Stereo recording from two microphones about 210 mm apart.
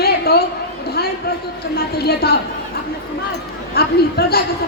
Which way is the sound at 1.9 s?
50° left (ahead or behind).